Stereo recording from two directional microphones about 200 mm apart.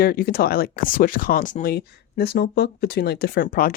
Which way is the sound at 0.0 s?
50° left (ahead or behind).